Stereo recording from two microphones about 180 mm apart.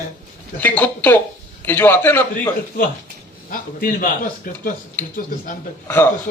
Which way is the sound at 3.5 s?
50° left (ahead or behind).